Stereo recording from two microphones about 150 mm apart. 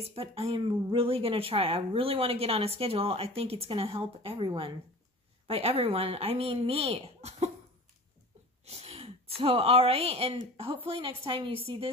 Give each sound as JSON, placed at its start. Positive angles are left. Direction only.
{"t": 0.0, "sound": "speech", "side_deg": -40}
{"t": 8.6, "sound": "speech", "side_deg": -45}